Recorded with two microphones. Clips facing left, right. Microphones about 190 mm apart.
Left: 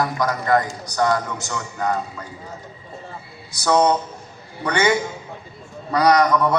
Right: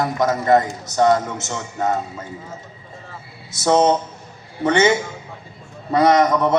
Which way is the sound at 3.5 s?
25° right (ahead or behind).